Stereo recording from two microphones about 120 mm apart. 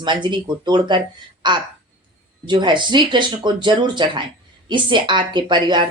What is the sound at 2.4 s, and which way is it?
Speech, 40° right (ahead or behind).